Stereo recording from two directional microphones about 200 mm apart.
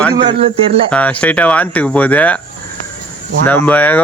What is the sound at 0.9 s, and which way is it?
Speech, 5° left (ahead or behind).